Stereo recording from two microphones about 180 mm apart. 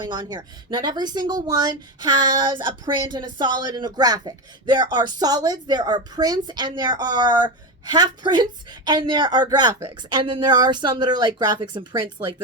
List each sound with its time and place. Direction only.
0.1 s speech: 20° right (ahead or behind)